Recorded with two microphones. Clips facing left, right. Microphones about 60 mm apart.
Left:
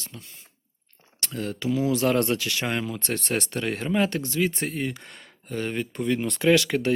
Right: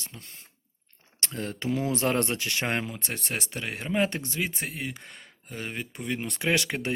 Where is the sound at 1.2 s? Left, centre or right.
Right; by 4.0 s centre.